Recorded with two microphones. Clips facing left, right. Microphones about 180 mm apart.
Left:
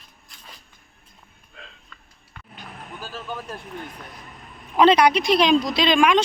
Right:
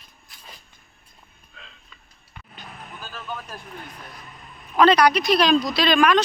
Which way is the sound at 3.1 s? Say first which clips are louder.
Left 2 dB; 25° left (ahead or behind).